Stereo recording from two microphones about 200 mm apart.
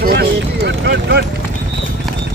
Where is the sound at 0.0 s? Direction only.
55° right (ahead or behind).